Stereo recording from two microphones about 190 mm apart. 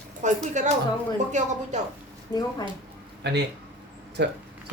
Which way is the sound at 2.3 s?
20° left (ahead or behind).